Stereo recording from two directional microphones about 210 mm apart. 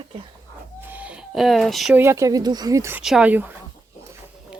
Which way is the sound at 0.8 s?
10° right (ahead or behind).